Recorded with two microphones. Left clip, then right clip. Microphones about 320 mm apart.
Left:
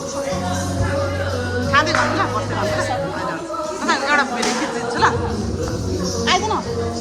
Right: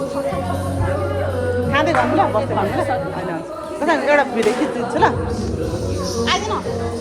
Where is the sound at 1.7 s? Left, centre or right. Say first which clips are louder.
Even; centre.